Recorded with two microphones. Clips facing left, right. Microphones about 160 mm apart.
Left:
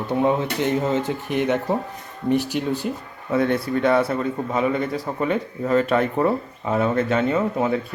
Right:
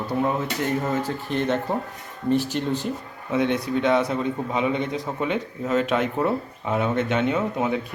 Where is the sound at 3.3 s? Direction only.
15° right (ahead or behind).